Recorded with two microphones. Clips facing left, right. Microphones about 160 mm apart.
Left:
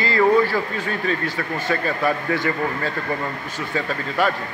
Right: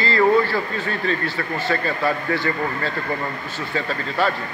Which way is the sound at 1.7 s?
15° left (ahead or behind).